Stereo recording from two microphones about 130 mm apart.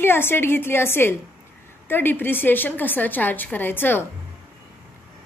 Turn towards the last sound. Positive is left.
turn(degrees=15)  # may be behind; listen again after turning